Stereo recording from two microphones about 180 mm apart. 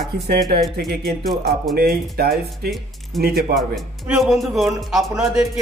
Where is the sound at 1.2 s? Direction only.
Centre (ahead or behind).